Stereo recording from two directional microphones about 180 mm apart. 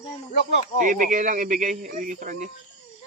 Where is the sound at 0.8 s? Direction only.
50° right (ahead or behind).